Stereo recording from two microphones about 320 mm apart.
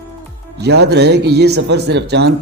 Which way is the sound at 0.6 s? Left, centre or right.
Right.